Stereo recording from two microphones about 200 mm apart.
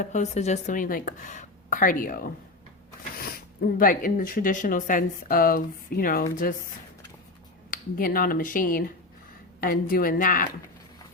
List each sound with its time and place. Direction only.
0.0 s speech: 35° left (ahead or behind)
7.7 s speech: 45° left (ahead or behind)